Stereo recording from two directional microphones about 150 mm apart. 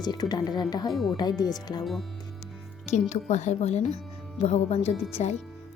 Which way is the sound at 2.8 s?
50° left (ahead or behind).